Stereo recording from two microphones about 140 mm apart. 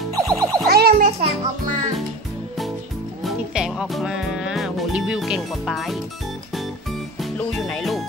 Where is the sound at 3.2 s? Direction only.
5° right (ahead or behind).